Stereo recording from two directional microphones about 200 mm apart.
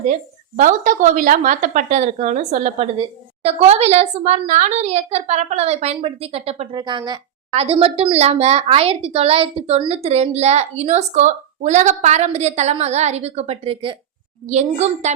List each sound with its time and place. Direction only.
0.0 s speech: 40° right (ahead or behind)